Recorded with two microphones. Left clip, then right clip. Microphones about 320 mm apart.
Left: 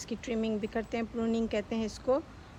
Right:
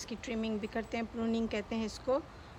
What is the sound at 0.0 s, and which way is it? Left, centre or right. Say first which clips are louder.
Speech: left 4 dB; centre.